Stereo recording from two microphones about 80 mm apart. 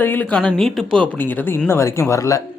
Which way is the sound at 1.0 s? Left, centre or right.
Left.